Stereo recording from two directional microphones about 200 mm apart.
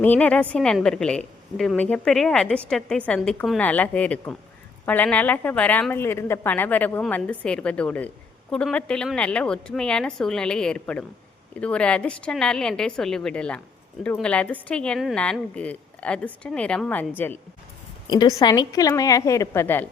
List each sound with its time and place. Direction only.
0.0 s speech: 5° left (ahead or behind)
18.1 s a woman's voice: 20° left (ahead or behind)